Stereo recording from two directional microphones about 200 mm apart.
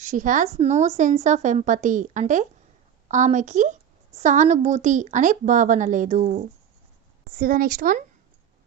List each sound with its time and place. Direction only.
0.0 s a woman's voice: 40° right (ahead or behind)